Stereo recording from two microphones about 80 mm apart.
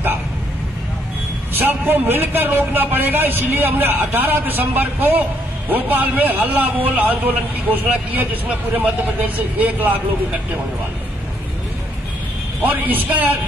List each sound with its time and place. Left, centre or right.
1.6 s a man's voice: right
12.6 s a man's voice: right